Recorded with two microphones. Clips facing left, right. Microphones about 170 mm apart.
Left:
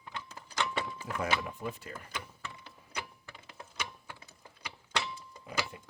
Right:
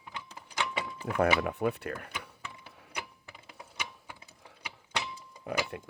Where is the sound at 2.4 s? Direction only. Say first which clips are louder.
Even; 10° right (ahead or behind).